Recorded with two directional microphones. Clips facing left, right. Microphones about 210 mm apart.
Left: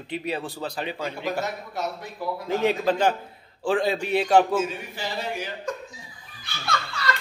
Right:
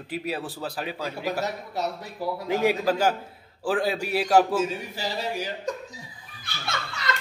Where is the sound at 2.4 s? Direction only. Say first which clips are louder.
Even; 10° right (ahead or behind).